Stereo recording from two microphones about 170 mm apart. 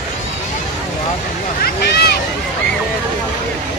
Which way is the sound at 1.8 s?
75° left (ahead or behind).